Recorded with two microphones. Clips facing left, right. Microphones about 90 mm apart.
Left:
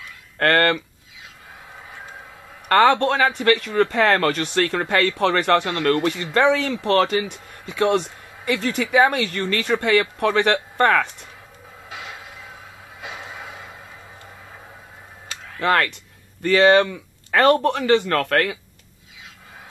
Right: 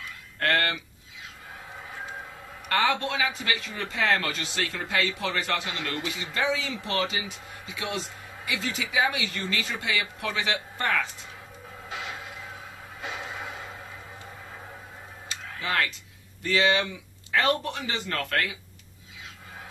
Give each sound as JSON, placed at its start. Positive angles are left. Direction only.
{"t": 0.4, "sound": "speech", "side_deg": 55}
{"t": 2.7, "sound": "speech", "side_deg": 55}
{"t": 15.2, "sound": "a sound", "side_deg": 60}
{"t": 16.4, "sound": "speech", "side_deg": 55}